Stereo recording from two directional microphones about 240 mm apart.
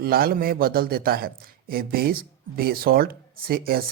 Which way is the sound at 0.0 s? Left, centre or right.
Right.